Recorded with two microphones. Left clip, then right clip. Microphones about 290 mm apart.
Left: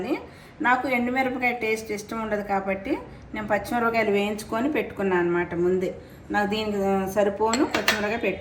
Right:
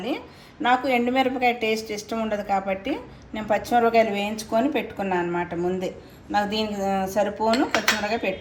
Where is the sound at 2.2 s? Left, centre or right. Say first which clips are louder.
Right 1 dB; right.